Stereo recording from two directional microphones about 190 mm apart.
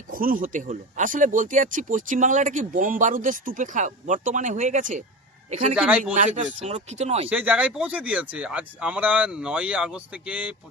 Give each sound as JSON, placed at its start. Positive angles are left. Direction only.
{"t": 0.1, "sound": "speech", "side_deg": -50}
{"t": 5.7, "sound": "speech", "side_deg": -5}
{"t": 6.1, "sound": "speech", "side_deg": -40}
{"t": 7.3, "sound": "speech", "side_deg": -5}